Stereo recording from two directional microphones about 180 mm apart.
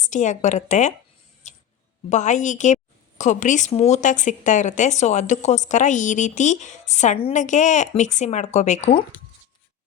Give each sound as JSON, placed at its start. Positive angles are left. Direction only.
{"t": 0.0, "sound": "a woman's voice", "side_deg": 45}
{"t": 1.5, "sound": "a sound", "side_deg": 40}
{"t": 2.0, "sound": "a woman's voice", "side_deg": 40}